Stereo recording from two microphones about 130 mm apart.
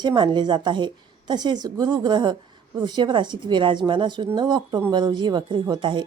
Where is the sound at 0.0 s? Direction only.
35° right (ahead or behind).